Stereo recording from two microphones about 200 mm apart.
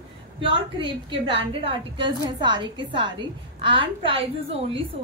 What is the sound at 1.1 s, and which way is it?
A woman's voice, 25° right (ahead or behind).